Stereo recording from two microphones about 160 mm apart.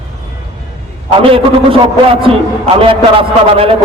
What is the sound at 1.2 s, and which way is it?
Speech, 35° right (ahead or behind).